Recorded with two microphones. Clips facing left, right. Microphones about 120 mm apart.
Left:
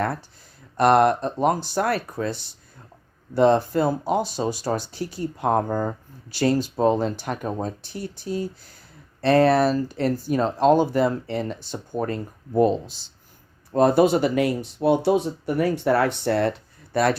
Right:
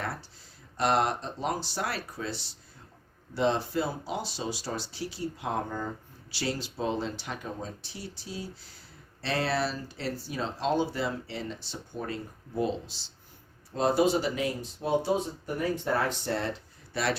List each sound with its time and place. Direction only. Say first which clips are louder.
0.8 s speech: left 9 dB; 55° left (ahead or behind)